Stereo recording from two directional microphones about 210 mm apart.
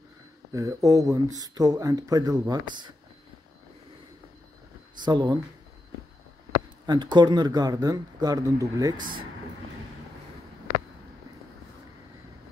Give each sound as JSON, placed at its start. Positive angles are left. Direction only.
{"t": 0.5, "sound": "speech", "side_deg": -15}
{"t": 5.0, "sound": "speech", "side_deg": -20}
{"t": 6.9, "sound": "speech", "side_deg": -20}
{"t": 8.9, "sound": "speech", "side_deg": -40}